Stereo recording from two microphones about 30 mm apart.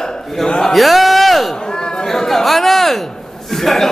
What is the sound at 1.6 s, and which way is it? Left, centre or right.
Speech, left.